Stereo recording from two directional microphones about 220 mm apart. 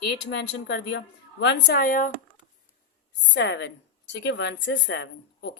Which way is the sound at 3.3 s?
55° left (ahead or behind).